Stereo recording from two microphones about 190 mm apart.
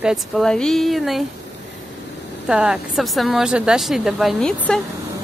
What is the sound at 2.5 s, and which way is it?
Speech, 5° right (ahead or behind).